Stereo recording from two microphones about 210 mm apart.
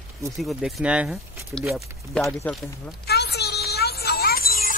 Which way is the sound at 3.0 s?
50° left (ahead or behind).